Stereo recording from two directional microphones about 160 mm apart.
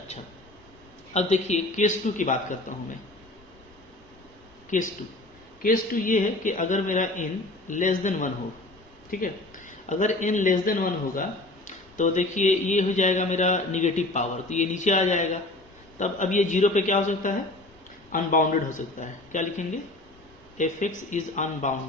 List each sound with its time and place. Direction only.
1.1 s a man's voice: 45° left (ahead or behind)
4.7 s a man's voice: 50° left (ahead or behind)